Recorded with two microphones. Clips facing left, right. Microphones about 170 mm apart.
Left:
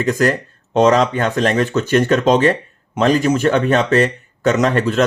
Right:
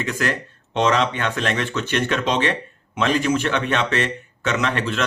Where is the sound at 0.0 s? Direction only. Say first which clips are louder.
Left 8 dB; 40° left (ahead or behind).